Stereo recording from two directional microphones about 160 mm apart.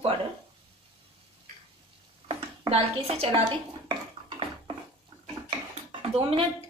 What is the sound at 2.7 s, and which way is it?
Speech, 40° right (ahead or behind).